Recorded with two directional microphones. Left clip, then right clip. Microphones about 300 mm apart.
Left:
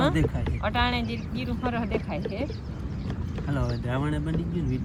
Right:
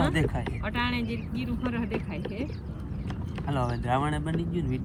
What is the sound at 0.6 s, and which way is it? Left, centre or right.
Speech, centre.